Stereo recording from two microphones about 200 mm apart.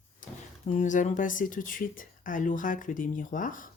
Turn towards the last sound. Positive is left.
turn(degrees=40)  # may be behind; listen again after turning